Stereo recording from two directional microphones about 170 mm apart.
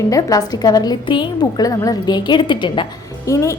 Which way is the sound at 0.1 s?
20° left (ahead or behind).